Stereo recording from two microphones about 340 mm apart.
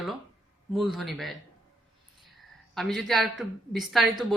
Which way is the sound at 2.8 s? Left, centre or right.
Centre.